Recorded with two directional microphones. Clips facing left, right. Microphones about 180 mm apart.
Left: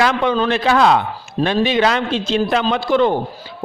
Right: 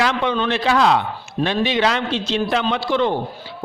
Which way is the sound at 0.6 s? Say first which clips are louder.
Left 2 dB; 50° left (ahead or behind).